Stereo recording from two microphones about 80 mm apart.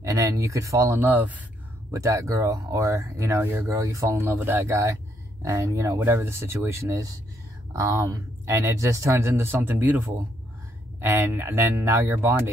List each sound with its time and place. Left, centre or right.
0.0 s speech: right
0.9 s speech: right
1.9 s speech: right
5.9 s speech: right
11.0 s speech: right